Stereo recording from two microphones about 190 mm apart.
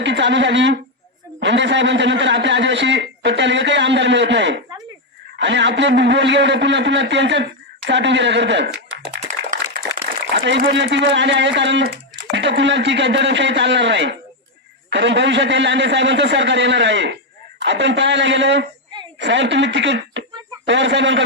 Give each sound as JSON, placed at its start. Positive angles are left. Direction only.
{"t": 0.0, "sound": "speech", "side_deg": -70}
{"t": 9.4, "sound": "a sound", "side_deg": -65}
{"t": 10.4, "sound": "speech", "side_deg": -65}